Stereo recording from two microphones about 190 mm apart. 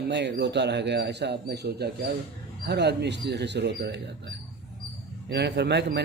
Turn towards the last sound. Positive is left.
turn(degrees=-60)  # may be behind; listen again after turning